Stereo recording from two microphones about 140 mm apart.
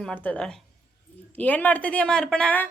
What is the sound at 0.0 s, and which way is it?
Speech, 10° left (ahead or behind).